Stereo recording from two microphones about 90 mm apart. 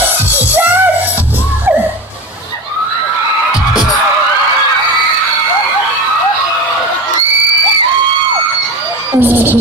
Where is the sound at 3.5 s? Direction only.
5° right (ahead or behind).